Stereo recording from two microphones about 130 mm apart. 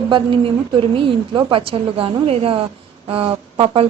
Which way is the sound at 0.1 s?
40° right (ahead or behind).